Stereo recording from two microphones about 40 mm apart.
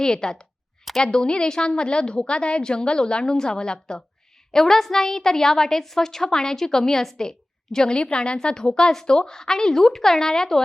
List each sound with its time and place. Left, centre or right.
0.0 s a woman's voice: centre
4.5 s a woman's voice: centre